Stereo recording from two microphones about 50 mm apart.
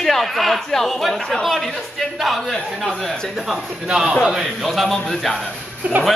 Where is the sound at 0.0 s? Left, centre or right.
Centre.